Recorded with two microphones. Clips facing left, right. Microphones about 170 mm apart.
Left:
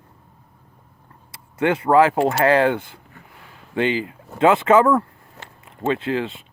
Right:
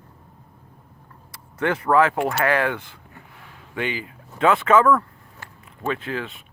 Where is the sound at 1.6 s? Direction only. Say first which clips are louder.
Left 3 dB; 20° left (ahead or behind).